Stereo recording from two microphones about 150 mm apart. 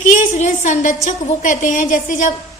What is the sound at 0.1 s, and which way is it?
A woman's voice, 55° left (ahead or behind).